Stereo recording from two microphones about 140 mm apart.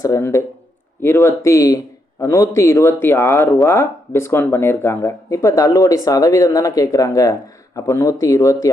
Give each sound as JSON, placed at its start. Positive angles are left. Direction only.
{"t": 0.0, "sound": "a man's voice", "side_deg": 20}